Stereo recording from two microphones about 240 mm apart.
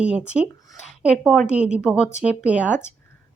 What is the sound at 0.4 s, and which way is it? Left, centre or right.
Speech, centre.